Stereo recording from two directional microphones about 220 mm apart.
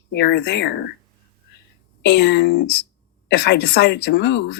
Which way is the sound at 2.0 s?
50° left (ahead or behind).